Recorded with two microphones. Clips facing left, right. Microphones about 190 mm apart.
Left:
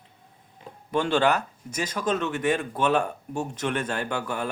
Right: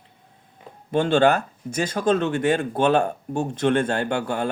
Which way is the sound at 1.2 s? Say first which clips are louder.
Right 5 dB; 50° right (ahead or behind).